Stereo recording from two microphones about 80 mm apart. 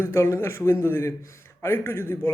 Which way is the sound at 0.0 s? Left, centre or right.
Left.